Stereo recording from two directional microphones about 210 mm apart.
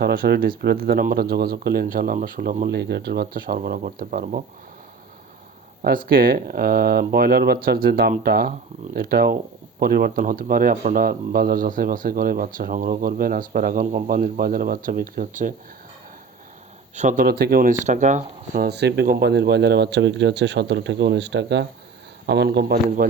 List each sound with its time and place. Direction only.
0.0 s speech: 45° right (ahead or behind)
2.6 s speech: 55° right (ahead or behind)
5.8 s speech: 45° right (ahead or behind)
16.9 s speech: 35° right (ahead or behind); by 23.0 s 50° right (ahead or behind)